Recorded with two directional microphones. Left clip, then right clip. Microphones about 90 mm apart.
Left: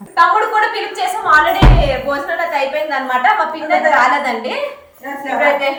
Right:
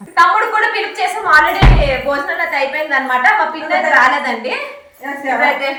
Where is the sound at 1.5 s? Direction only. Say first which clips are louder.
Even; 20° left (ahead or behind).